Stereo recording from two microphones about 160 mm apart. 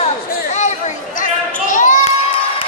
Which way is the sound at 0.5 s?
50° left (ahead or behind).